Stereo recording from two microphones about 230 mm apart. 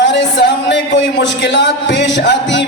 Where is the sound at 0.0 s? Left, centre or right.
Left.